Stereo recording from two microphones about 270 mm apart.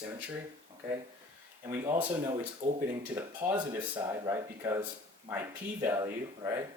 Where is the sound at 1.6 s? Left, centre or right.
Centre.